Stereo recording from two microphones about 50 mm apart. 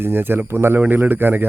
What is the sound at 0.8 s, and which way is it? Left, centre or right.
Speech, right.